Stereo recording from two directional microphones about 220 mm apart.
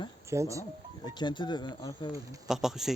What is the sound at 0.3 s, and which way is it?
Speech, 15° right (ahead or behind).